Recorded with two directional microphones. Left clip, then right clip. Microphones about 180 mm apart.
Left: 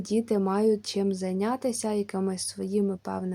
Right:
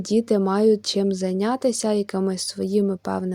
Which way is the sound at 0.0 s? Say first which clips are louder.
Right 6 dB; 25° right (ahead or behind).